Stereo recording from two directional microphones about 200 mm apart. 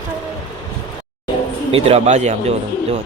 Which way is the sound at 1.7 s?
30° right (ahead or behind).